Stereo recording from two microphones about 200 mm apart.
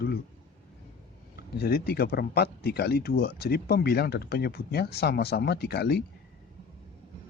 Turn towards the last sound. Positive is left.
turn(degrees=50)  # may be behind; listen again after turning